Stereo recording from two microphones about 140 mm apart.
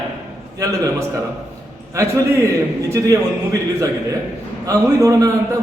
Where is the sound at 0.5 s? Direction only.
25° right (ahead or behind).